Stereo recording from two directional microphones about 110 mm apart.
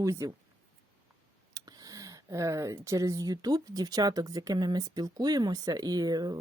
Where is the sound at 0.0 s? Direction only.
30° right (ahead or behind).